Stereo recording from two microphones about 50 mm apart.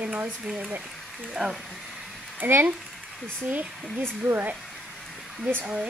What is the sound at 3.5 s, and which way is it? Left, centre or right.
Speech, right.